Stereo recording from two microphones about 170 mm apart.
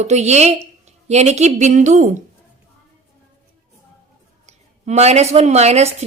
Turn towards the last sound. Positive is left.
turn(degrees=-40)  # may be behind; listen again after turning